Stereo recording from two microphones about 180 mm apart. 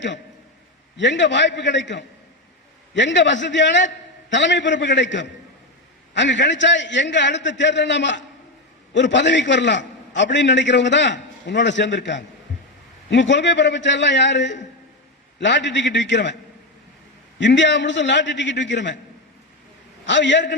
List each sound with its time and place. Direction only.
0.9 s a man's voice: 90° left
17.4 s a man's voice: 85° left
20.1 s a man's voice: 90° left